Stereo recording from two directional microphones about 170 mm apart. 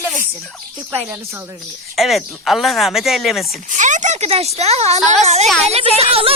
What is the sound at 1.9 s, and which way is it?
Speech, centre (ahead or behind).